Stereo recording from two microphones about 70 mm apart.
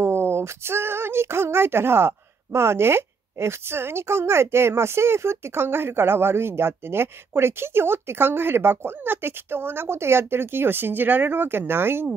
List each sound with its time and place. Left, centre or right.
0.0 s speech: right